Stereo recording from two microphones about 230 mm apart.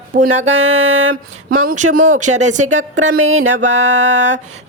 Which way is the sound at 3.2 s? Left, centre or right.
Right.